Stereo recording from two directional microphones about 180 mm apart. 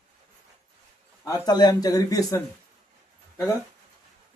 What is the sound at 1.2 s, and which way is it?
A man's voice, 20° left (ahead or behind).